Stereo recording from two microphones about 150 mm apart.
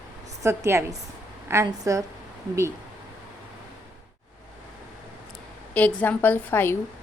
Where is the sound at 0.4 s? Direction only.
20° right (ahead or behind).